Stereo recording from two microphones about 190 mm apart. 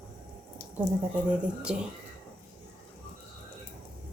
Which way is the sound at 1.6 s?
5° right (ahead or behind).